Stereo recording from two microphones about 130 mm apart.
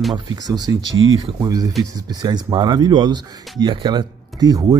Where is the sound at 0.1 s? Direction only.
30° right (ahead or behind).